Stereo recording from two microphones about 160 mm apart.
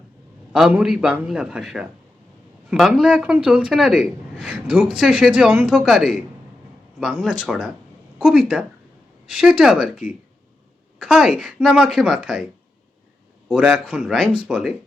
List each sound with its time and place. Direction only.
0.5 s a man's voice: 5° right (ahead or behind)
13.5 s a man's voice: 5° right (ahead or behind)